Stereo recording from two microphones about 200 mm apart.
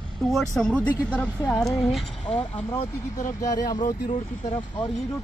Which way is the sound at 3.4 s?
20° left (ahead or behind).